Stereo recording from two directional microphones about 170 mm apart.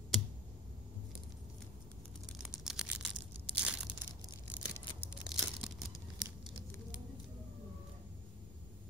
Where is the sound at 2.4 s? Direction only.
5° right (ahead or behind).